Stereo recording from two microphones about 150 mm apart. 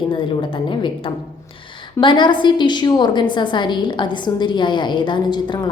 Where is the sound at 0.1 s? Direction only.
35° left (ahead or behind).